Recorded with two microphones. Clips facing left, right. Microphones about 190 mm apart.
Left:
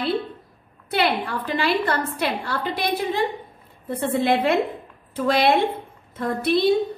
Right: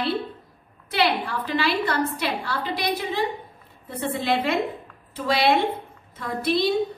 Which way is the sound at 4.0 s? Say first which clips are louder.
Left 4 dB; 55° left (ahead or behind).